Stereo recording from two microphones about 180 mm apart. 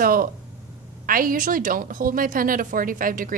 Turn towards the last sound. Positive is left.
turn(degrees=-50)  # may be behind; listen again after turning